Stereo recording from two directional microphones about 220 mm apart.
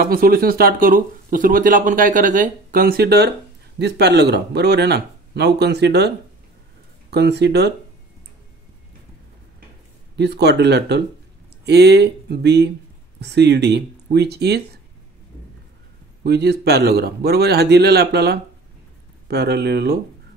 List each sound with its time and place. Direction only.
0.0 s speech: 40° right (ahead or behind)
10.1 s speech: 50° right (ahead or behind)
16.3 s speech: 50° right (ahead or behind)